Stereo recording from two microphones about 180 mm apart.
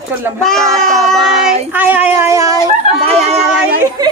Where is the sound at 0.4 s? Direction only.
Centre (ahead or behind).